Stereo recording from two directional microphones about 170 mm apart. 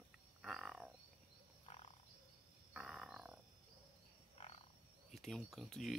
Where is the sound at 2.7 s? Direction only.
5° right (ahead or behind).